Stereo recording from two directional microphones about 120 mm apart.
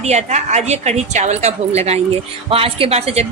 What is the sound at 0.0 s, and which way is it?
Speech, 65° right (ahead or behind).